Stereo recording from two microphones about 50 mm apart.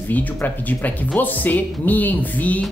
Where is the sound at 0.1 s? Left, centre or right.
Left.